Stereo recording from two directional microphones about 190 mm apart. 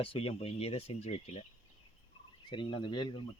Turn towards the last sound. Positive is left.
turn(degrees=25)  # may be behind; listen again after turning